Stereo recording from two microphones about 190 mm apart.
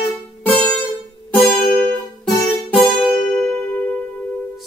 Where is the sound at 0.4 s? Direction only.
10° left (ahead or behind).